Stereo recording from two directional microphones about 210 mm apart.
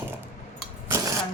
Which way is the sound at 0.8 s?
15° right (ahead or behind).